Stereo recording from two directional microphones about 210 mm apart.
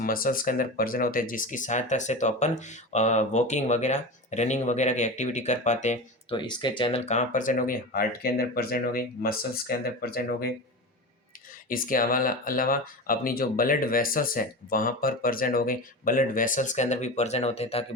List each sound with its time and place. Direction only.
0.0 s speech: 40° left (ahead or behind)
6.3 s speech: 20° left (ahead or behind); by 10.5 s 45° left (ahead or behind)
11.7 s speech: 40° left (ahead or behind)